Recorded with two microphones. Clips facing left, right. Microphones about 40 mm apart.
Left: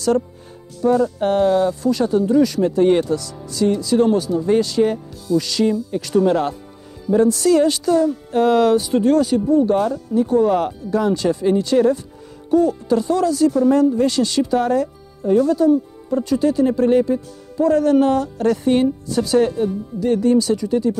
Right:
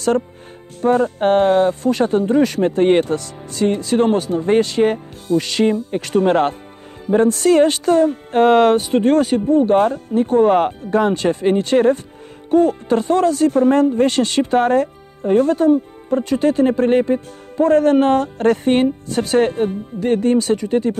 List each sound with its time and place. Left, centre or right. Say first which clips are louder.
0.7 s speech: right 1 dB; right